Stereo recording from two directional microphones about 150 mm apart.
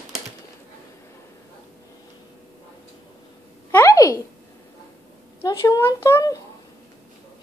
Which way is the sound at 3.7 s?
20° left (ahead or behind).